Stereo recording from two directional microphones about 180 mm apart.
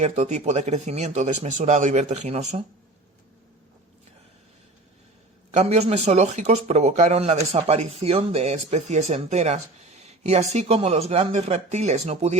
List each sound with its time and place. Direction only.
0.0 s speech: 40° right (ahead or behind)
5.5 s speech: 35° right (ahead or behind)